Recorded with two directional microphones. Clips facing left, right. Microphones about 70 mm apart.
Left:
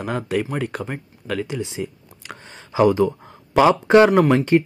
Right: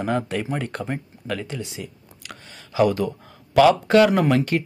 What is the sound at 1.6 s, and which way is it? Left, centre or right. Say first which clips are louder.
Speech: left 6 dB; left.